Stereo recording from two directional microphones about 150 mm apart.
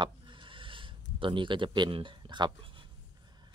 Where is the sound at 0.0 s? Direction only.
35° right (ahead or behind).